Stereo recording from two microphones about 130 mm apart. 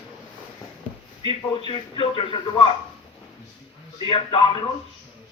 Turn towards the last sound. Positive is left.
turn(degrees=40)  # may be behind; listen again after turning